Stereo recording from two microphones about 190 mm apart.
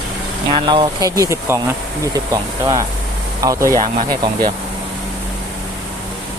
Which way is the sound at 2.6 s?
15° right (ahead or behind).